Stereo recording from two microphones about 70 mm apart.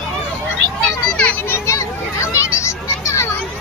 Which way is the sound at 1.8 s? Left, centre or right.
Left.